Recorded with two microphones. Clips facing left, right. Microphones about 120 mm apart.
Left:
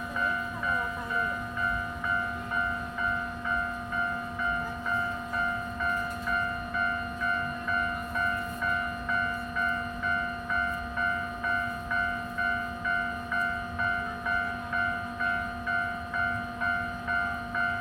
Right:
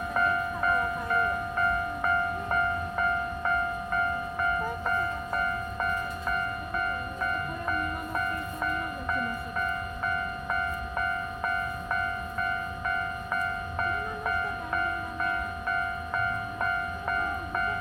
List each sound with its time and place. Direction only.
0.1 s train: 50° right (ahead or behind)